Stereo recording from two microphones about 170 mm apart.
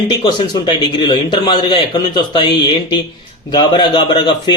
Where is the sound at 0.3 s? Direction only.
25° left (ahead or behind).